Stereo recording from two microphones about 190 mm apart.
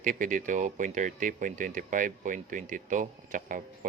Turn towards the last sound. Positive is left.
turn(degrees=-45)  # may be behind; listen again after turning